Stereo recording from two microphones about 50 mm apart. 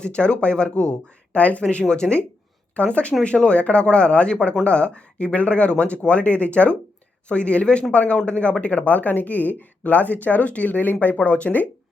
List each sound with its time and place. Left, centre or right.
0.0 s speech: left
1.6 s speech: centre